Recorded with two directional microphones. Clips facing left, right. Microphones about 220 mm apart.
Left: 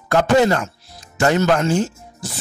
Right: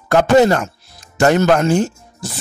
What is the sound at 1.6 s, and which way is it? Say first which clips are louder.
Speech: right 3 dB; 65° right (ahead or behind).